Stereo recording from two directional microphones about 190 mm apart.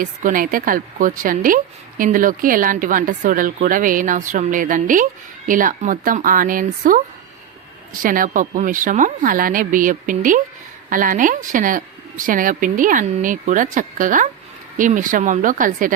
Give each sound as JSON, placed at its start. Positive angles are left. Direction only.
{"t": 0.0, "sound": "a woman's voice", "side_deg": -45}